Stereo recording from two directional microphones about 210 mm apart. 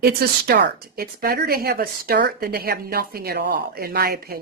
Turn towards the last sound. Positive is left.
turn(degrees=-45)  # may be behind; listen again after turning